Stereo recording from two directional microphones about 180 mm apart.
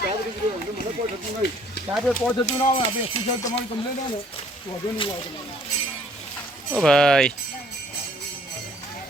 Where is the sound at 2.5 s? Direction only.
30° left (ahead or behind).